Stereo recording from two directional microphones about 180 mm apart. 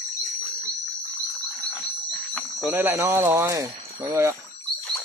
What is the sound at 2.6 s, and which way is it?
Speech, 10° right (ahead or behind).